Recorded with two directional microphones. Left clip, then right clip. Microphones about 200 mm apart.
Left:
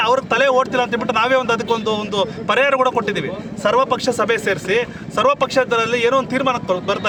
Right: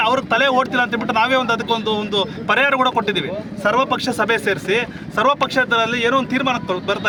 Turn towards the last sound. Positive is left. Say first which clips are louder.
# left 1 dB
turn(degrees=0)  # may be behind; listen again after turning